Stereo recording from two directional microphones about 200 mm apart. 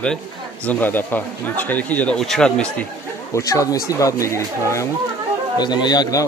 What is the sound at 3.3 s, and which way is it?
Speech, 15° left (ahead or behind).